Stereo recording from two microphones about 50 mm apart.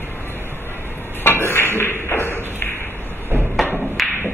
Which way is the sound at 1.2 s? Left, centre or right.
Left.